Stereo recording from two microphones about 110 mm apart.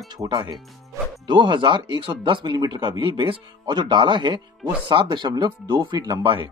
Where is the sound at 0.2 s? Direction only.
40° right (ahead or behind).